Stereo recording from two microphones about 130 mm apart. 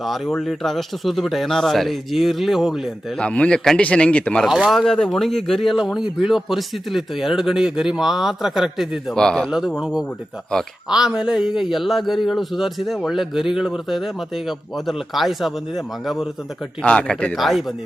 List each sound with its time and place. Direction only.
0.0 s speech: centre (ahead or behind)
3.2 s a man's voice: 10° left (ahead or behind)
4.4 s a man's voice: 5° right (ahead or behind)